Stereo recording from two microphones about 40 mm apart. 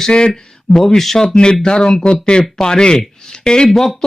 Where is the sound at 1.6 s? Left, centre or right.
Centre.